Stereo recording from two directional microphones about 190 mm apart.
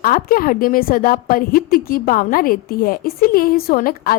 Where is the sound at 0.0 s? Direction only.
50° left (ahead or behind).